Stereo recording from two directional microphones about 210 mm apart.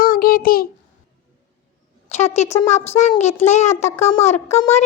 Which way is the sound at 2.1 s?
30° left (ahead or behind).